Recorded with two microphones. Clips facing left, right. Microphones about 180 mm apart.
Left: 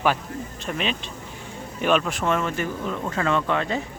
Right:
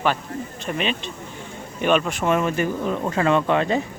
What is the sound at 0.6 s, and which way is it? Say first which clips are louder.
Speech: right 2 dB; centre (ahead or behind).